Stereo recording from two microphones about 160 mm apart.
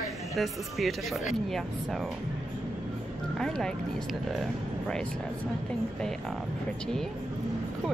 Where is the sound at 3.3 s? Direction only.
5° left (ahead or behind).